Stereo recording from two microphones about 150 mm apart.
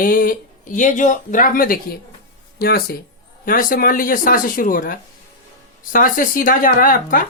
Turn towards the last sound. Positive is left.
turn(degrees=65)  # may be behind; listen again after turning